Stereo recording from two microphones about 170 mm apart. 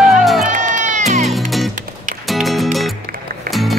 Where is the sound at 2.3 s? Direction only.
Centre (ahead or behind).